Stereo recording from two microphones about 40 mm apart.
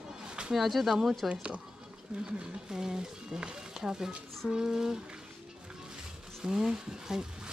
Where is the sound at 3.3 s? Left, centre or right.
Right.